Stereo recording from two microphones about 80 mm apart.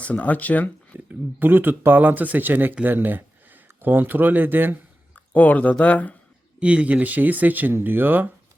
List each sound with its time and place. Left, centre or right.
0.0 s speech: centre
0.9 s speech: right
5.1 s speech: left
6.6 s speech: centre